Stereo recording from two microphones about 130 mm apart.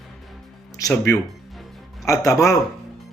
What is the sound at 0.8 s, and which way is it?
A man's voice, 25° left (ahead or behind).